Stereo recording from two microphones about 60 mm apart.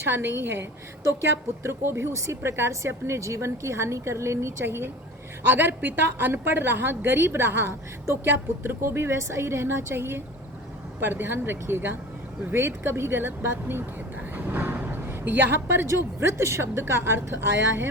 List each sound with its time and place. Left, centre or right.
0.0 s a woman's voice: right
1.6 s a woman's voice: right
14.3 s a sound: right
15.6 s speech: right